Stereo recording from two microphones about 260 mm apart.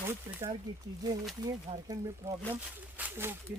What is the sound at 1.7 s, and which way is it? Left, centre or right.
Speech, right.